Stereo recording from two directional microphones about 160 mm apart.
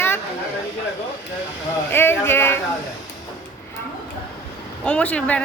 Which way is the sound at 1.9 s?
15° left (ahead or behind).